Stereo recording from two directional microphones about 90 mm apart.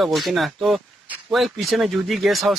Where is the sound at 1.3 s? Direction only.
Centre (ahead or behind).